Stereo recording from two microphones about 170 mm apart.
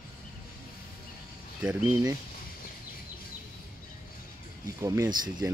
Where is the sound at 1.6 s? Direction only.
5° right (ahead or behind).